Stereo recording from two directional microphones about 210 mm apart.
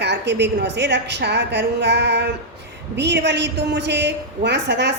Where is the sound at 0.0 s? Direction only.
55° right (ahead or behind).